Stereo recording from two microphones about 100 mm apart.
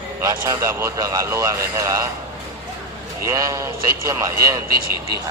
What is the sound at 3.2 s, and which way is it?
Speech, 30° right (ahead or behind).